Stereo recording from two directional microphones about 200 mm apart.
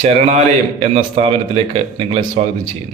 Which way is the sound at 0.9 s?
30° right (ahead or behind).